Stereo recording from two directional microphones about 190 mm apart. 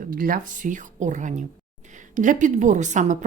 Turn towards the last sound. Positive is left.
turn(degrees=-40)  # may be behind; listen again after turning